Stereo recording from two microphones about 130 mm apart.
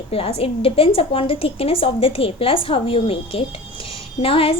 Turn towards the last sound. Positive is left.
turn(degrees=45)  # may be behind; listen again after turning